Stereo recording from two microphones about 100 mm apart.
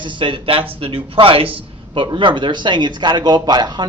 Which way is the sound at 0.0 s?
55° right (ahead or behind).